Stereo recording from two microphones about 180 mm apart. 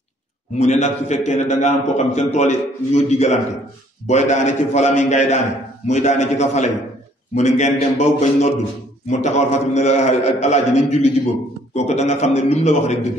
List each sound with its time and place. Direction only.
0.6 s a man's voice: 40° left (ahead or behind)